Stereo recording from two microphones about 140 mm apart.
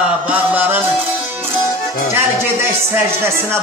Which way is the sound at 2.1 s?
15° right (ahead or behind).